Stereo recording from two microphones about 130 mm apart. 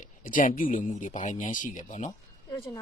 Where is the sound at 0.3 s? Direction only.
90° left.